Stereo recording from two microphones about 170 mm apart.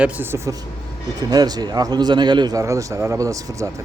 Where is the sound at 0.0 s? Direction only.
15° right (ahead or behind).